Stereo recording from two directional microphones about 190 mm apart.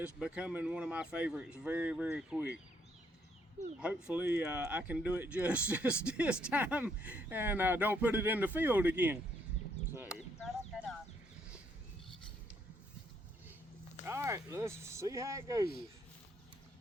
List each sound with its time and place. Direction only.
0.0 s speech: 5° right (ahead or behind)
3.8 s speech: 5° right (ahead or behind)
10.4 s a sound: centre (ahead or behind)
14.0 s speech: 15° right (ahead or behind)